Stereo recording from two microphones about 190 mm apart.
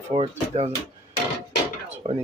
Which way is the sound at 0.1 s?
25° right (ahead or behind).